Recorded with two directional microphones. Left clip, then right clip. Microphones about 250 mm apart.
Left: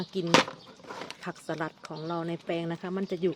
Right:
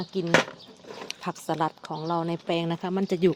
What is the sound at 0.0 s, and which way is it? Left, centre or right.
Speech, centre.